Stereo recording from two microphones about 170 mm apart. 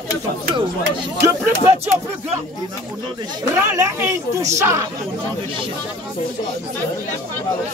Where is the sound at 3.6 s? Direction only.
15° right (ahead or behind).